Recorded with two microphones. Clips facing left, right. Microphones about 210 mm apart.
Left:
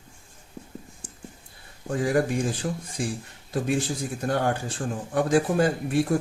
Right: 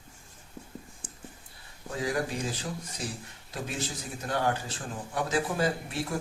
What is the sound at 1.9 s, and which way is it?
Speech, 50° left (ahead or behind).